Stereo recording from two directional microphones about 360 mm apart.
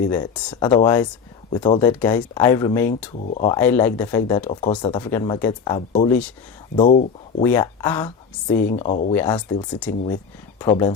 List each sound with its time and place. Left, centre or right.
0.1 s speech: centre
3.6 s speech: centre
6.7 s speech: left
7.4 s speech: centre
8.7 s speech: centre